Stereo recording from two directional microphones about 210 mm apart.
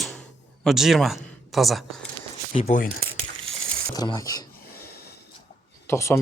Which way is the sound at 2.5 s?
35° left (ahead or behind).